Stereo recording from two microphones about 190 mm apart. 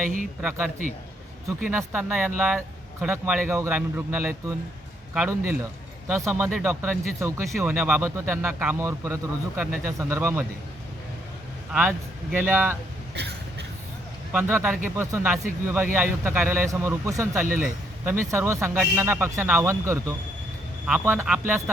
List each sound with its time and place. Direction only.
0.4 s a man's voice: 5° right (ahead or behind)
11.7 s a man's voice: 10° right (ahead or behind)
13.1 s vehicle: 60° right (ahead or behind)
14.3 s a man's voice: 10° right (ahead or behind)